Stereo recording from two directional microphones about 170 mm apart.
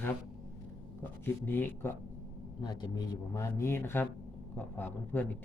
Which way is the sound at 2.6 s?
25° left (ahead or behind).